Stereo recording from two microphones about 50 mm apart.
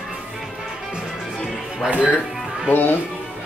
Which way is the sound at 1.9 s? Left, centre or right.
Right.